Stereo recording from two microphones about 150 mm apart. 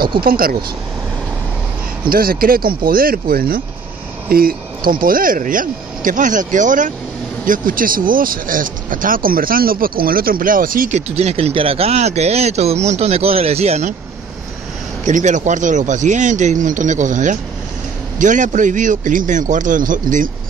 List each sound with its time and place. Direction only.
0.2 s speech: 75° right (ahead or behind)
2.0 s speech: 75° right (ahead or behind)
11.1 s speech: 45° right (ahead or behind)
15.0 s speech: 55° right (ahead or behind)